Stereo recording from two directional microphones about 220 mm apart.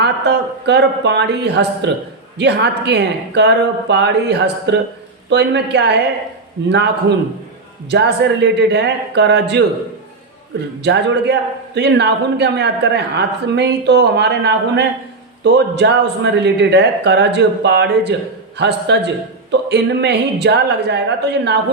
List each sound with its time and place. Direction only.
0.0 s a man's voice: 50° right (ahead or behind)
10.8 s a man's voice: 50° right (ahead or behind)